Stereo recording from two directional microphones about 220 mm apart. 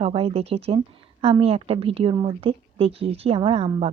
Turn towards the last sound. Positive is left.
turn(degrees=-25)  # may be behind; listen again after turning